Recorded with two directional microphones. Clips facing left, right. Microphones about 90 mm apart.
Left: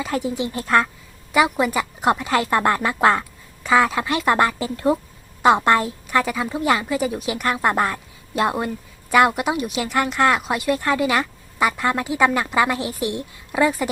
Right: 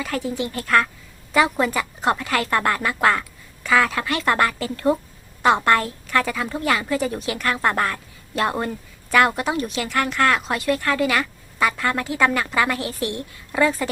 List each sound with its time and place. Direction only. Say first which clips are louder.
0.0 s speech: left 2 dB; 20° left (ahead or behind)
1.3 s a woman's voice: left 1 dB; 10° left (ahead or behind)